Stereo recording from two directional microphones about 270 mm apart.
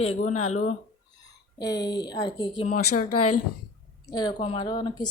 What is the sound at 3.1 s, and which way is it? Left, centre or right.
Speech, left.